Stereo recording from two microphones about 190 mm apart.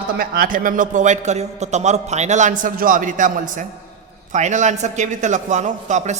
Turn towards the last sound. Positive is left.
turn(degrees=-40)  # may be behind; listen again after turning